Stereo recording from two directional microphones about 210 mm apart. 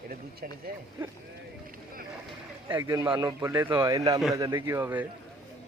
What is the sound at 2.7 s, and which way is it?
Speech, 15° right (ahead or behind).